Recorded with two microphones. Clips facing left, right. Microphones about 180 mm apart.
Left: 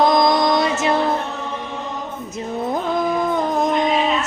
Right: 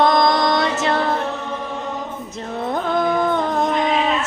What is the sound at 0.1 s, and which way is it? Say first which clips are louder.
Music: left 1 dB; 20° left (ahead or behind).